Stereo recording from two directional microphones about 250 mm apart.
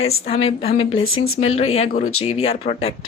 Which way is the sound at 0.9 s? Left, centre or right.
Left.